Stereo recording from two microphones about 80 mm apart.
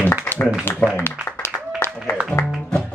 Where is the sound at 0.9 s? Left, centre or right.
Left.